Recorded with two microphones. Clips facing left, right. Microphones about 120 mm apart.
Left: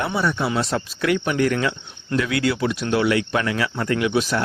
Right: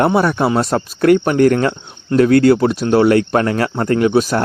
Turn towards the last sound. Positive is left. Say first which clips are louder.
# right 7 dB
turn(degrees=-45)  # may be behind; listen again after turning